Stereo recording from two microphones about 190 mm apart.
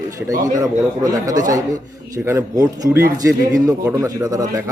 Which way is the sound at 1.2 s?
20° right (ahead or behind).